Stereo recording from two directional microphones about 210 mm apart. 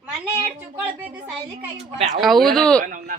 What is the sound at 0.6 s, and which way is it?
Speech, 5° right (ahead or behind).